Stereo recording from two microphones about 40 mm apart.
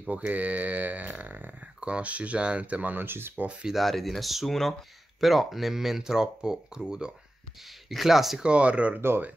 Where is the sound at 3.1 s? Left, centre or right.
Right.